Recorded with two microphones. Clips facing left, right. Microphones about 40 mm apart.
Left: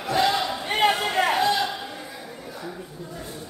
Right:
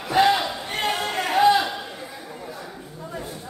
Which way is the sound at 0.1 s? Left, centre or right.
Centre.